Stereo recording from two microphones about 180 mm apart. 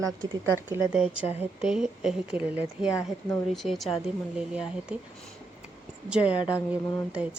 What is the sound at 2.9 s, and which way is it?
Speech, 15° left (ahead or behind).